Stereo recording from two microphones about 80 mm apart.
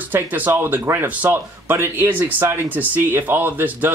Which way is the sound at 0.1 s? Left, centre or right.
Right.